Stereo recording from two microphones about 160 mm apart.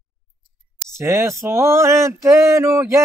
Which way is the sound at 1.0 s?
15° right (ahead or behind).